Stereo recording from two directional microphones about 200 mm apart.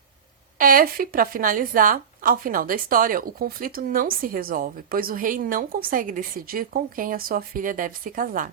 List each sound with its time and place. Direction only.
0.6 s speech: 45° right (ahead or behind)